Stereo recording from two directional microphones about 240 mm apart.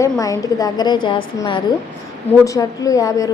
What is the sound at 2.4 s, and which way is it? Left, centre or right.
Speech, centre.